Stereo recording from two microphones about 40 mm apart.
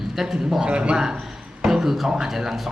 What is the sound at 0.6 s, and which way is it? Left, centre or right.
Speech, right.